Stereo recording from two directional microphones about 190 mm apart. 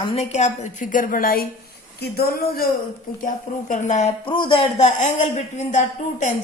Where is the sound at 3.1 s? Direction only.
45° left (ahead or behind).